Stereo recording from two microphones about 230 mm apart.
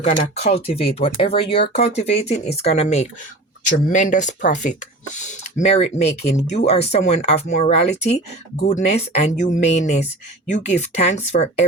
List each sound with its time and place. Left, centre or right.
0.0 s speech: left